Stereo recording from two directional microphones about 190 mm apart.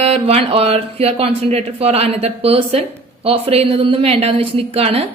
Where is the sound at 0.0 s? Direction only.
30° right (ahead or behind).